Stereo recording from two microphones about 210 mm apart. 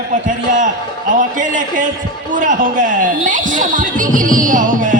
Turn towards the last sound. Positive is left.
turn(degrees=-40)  # may be behind; listen again after turning